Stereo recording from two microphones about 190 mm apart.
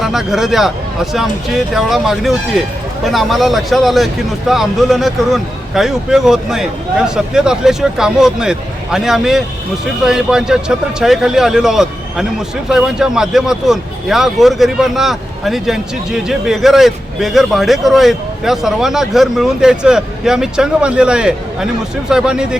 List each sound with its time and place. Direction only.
0.0 s a man's voice: centre (ahead or behind)
1.7 s a man's voice: centre (ahead or behind)